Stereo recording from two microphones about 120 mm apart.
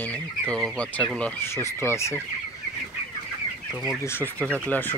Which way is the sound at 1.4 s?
20° left (ahead or behind).